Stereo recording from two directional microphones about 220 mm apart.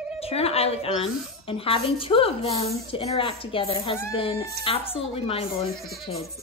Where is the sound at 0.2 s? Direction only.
25° left (ahead or behind).